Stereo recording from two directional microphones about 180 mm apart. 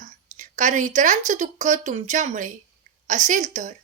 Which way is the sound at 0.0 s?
45° right (ahead or behind).